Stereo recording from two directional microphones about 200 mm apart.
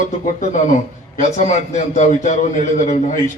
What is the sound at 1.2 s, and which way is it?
A man's voice, 40° left (ahead or behind).